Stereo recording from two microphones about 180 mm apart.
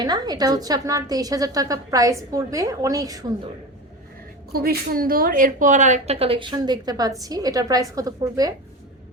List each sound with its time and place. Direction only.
0.0 s a woman's voice: 20° right (ahead or behind)
4.5 s a woman's voice: 60° right (ahead or behind); by 8.5 s 20° right (ahead or behind)